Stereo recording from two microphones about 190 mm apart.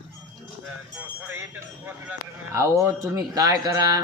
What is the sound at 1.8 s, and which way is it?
Speech, 15° right (ahead or behind).